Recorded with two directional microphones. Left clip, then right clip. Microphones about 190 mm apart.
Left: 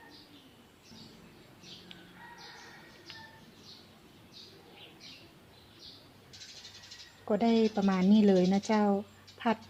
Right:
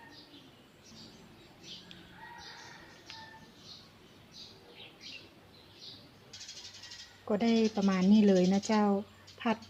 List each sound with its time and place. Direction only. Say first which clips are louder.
7.3 s a woman's voice: left 2 dB; 10° left (ahead or behind)